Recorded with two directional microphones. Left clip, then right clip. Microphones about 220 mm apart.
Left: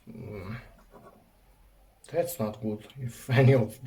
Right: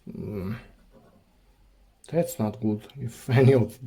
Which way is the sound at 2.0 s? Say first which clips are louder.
Right 2 dB; 45° right (ahead or behind).